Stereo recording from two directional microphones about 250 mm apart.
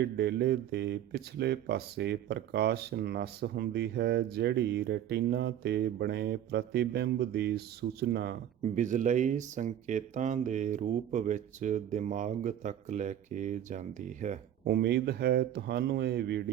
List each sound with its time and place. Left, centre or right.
0.0 s speech: right